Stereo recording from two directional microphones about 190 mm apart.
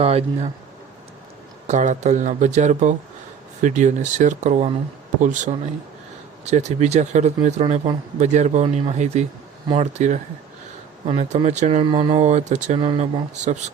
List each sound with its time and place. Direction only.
0.0 s speech: 30° right (ahead or behind)
1.6 s speech: 40° right (ahead or behind)
12.9 s speech: 25° right (ahead or behind)
13.3 s speech: 40° right (ahead or behind)